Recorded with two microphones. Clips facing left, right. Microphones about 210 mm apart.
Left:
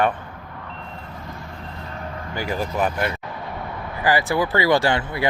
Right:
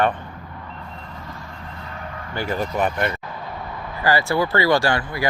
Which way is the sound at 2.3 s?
10° left (ahead or behind).